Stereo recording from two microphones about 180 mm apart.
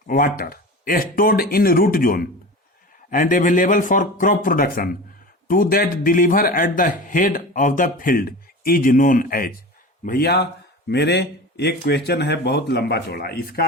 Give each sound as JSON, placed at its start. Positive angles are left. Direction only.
{"t": 0.1, "sound": "speech", "side_deg": 55}
{"t": 10.1, "sound": "speech", "side_deg": 60}